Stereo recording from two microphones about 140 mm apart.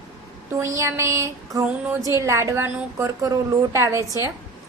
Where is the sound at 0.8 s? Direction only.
20° right (ahead or behind).